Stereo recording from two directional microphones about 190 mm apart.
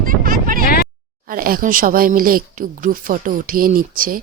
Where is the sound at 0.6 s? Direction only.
50° left (ahead or behind).